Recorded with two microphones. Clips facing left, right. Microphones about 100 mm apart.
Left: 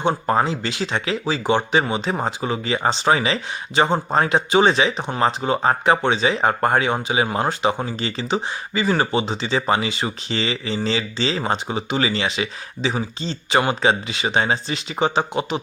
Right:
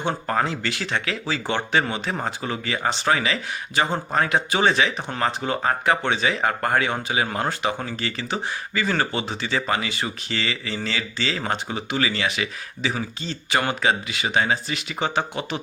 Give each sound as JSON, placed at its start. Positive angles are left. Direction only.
{"t": 0.0, "sound": "speech", "side_deg": 20}
{"t": 14.9, "sound": "speech", "side_deg": 15}